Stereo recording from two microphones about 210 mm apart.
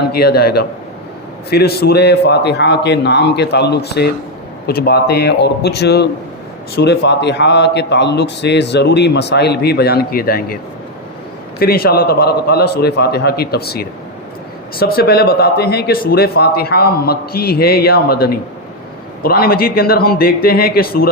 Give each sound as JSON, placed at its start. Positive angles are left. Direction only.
{"t": 0.1, "sound": "a man's voice", "side_deg": 50}
{"t": 11.6, "sound": "a man's voice", "side_deg": 45}